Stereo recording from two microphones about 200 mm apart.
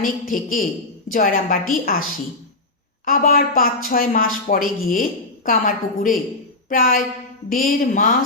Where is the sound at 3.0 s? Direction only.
45° left (ahead or behind).